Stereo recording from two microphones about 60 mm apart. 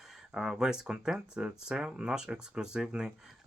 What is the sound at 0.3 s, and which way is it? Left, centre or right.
Speech, centre.